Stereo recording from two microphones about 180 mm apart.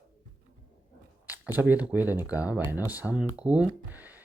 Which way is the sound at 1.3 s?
10° right (ahead or behind).